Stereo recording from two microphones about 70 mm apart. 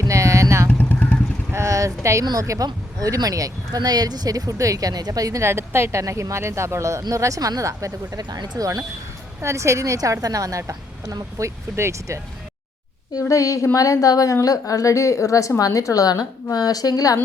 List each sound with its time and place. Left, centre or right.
0.1 s vehicle: right
0.7 s vehicle: left
1.5 s a sound: right
2.4 s speech: right
2.6 s speech: right
3.8 s speech: right
5.4 s speech: right
8.2 s speech: right
9.4 s speech: right
13.1 s a woman's voice: left